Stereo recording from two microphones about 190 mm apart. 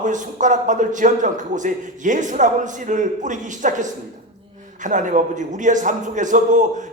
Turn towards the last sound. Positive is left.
turn(degrees=-40)  # may be behind; listen again after turning